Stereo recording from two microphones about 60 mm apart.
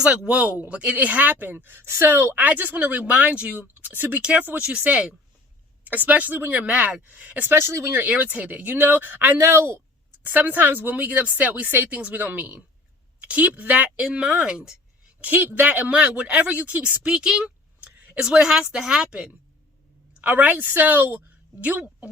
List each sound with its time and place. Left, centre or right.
0.0 s speech: centre; by 4.2 s right
4.2 s speech: right
7.5 s speech: right
8.1 s speech: right
9.4 s speech: right
10.2 s speech: right; by 14.7 s centre
15.2 s speech: right; by 19.3 s centre
20.2 s speech: right